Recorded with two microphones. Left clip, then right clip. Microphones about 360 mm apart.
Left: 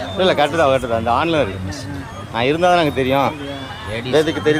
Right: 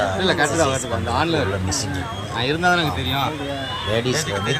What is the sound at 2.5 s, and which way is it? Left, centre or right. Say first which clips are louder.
Speech: left 5 dB; centre.